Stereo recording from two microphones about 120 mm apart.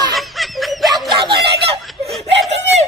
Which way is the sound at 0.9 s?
45° right (ahead or behind).